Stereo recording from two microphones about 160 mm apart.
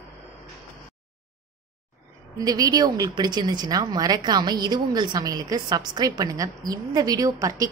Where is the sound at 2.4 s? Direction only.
25° right (ahead or behind).